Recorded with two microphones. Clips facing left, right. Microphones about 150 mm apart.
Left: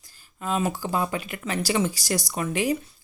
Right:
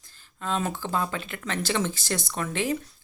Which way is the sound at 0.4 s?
10° left (ahead or behind).